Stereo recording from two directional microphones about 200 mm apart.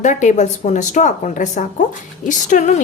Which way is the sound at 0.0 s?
35° left (ahead or behind).